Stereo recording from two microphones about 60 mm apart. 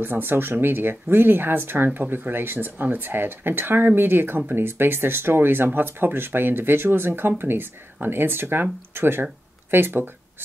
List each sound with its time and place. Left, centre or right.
0.0 s speech: right